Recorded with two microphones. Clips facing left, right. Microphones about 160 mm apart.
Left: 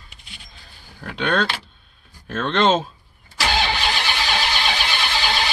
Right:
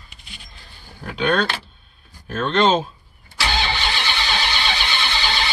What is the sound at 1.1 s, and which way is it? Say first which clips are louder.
Speech: right 2 dB; centre (ahead or behind).